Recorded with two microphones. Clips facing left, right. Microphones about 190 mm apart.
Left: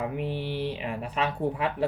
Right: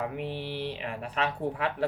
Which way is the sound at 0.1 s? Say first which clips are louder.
Left 3 dB; 15° left (ahead or behind).